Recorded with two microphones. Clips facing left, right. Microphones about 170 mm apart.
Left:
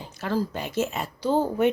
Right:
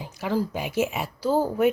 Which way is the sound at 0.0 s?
15° right (ahead or behind).